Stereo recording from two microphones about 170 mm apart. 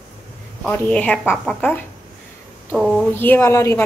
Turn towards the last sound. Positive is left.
turn(degrees=15)  # may be behind; listen again after turning